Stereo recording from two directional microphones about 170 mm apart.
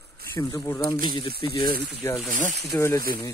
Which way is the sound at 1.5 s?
60° right (ahead or behind).